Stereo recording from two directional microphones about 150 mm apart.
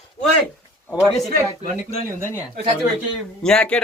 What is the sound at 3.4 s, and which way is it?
Speech, 5° left (ahead or behind).